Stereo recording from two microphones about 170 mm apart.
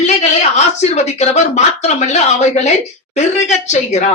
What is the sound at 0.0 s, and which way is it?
A woman's voice, 40° left (ahead or behind).